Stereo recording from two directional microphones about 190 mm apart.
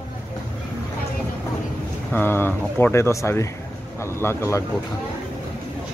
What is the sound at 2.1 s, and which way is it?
Speech, 10° left (ahead or behind).